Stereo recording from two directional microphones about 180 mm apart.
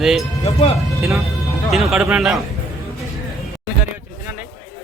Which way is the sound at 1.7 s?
Centre (ahead or behind).